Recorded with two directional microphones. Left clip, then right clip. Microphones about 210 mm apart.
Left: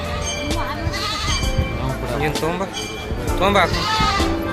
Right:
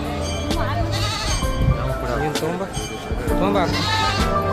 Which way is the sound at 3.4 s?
Centre (ahead or behind).